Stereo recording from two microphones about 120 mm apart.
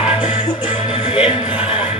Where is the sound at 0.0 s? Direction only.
45° left (ahead or behind).